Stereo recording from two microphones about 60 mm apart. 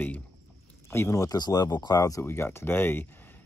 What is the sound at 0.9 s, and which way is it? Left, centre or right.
Speech, left.